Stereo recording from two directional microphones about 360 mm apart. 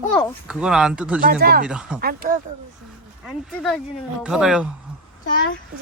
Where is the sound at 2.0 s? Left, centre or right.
Right.